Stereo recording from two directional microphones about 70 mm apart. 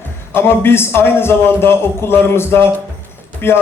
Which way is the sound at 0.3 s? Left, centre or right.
Left.